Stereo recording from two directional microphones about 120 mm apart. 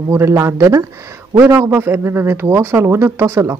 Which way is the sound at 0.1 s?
25° right (ahead or behind).